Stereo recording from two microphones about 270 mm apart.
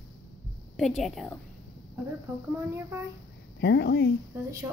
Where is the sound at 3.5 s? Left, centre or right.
Left.